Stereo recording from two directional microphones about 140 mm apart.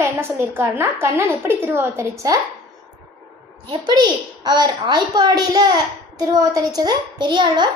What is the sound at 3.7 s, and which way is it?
A woman's voice, 30° right (ahead or behind).